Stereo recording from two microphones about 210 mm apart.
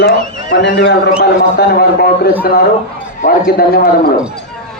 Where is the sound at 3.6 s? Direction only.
45° left (ahead or behind).